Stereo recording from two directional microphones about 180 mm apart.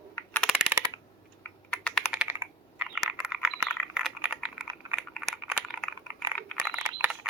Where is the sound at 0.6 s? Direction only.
10° right (ahead or behind).